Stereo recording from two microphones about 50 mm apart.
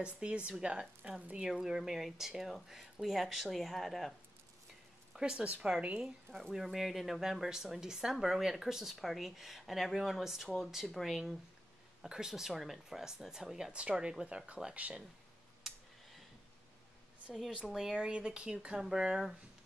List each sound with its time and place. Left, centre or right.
0.0 s speech: right
1.5 s speech: centre
5.1 s a woman's voice: centre
5.5 s speech: right
6.5 s speech: centre
12.0 s speech: centre
15.6 s a sound: centre
17.5 s speech: centre